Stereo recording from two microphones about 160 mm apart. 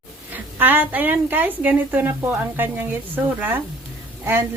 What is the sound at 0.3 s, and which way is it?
A woman's voice, 10° right (ahead or behind).